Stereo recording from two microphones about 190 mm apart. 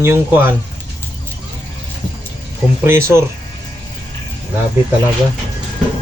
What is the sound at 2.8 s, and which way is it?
Speech, 15° right (ahead or behind).